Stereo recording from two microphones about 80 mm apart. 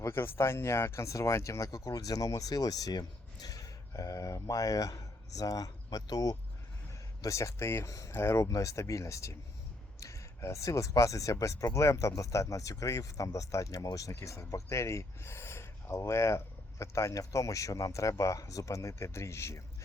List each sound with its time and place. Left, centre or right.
0.0 s speech: left
14.1 s speech: left